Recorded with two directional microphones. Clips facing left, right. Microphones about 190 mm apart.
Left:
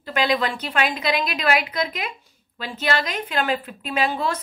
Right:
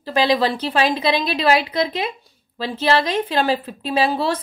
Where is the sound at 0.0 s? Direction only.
30° right (ahead or behind).